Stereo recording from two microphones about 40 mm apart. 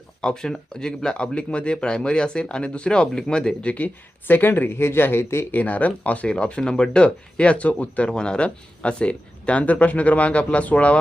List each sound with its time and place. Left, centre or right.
0.2 s speech: centre
4.3 s speech: left
5.5 s speech: left
6.2 s speech: left
8.1 s speech: left